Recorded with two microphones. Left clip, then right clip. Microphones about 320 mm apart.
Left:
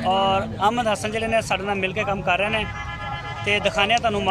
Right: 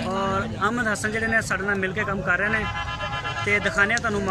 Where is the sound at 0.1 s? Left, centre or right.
Centre.